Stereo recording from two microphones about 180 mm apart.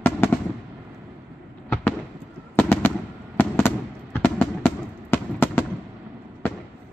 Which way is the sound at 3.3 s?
10° left (ahead or behind).